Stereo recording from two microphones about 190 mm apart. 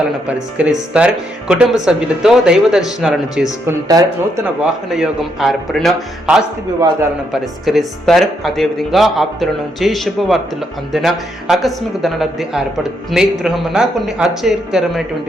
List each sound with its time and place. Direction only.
0.3 s speech: 5° right (ahead or behind)
3.7 s speech: 15° right (ahead or behind)
4.6 s speech: centre (ahead or behind)
7.6 s speech: centre (ahead or behind)